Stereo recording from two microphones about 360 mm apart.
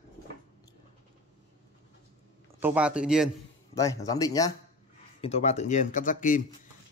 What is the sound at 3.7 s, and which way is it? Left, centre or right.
Speech, centre.